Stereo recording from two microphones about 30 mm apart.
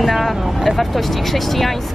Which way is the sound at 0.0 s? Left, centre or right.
Centre.